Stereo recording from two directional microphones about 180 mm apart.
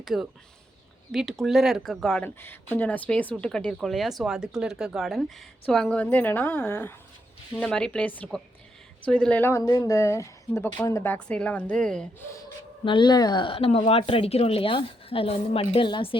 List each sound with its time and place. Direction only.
0.0 s speech: centre (ahead or behind)
12.8 s speech: 25° left (ahead or behind)